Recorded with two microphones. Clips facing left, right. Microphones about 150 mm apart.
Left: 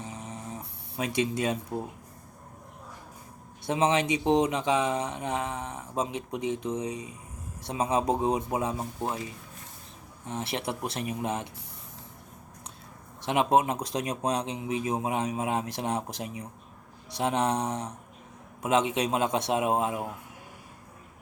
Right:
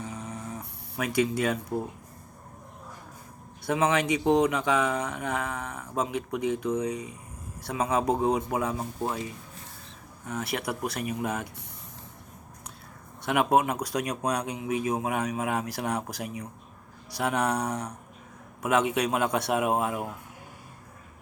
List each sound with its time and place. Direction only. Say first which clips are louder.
0.0 s a sound: right 2 dB; 20° left (ahead or behind)
3.7 s a man's voice: even; 25° left (ahead or behind)
10.2 s a man's voice: right 1 dB; 25° left (ahead or behind)
13.2 s a man's voice: even; 25° left (ahead or behind)